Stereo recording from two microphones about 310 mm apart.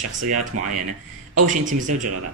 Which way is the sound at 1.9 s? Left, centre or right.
Right.